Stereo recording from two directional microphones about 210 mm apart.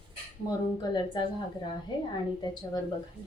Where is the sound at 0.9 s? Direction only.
20° left (ahead or behind).